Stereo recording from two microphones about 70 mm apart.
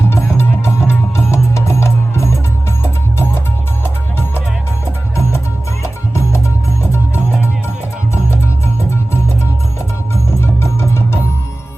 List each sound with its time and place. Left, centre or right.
0.3 s music: left
5.8 s music: left
10.4 s music: left